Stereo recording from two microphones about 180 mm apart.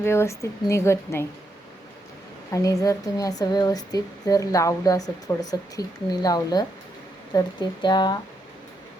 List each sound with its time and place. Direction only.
0.0 s a woman's voice: 15° left (ahead or behind)
2.5 s speech: 20° left (ahead or behind)